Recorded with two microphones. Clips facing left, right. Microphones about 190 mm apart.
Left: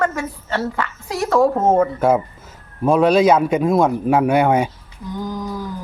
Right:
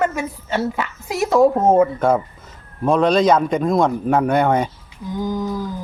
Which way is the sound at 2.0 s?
5° left (ahead or behind).